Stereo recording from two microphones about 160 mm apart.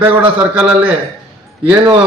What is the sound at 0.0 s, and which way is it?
Speech, 10° right (ahead or behind).